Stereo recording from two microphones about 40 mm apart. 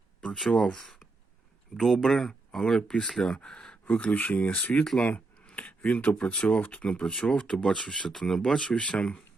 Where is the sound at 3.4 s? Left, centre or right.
Centre.